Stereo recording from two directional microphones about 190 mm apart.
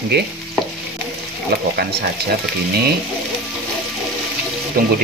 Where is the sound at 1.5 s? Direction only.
55° right (ahead or behind).